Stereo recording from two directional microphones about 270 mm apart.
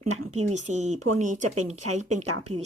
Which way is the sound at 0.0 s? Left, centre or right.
Right.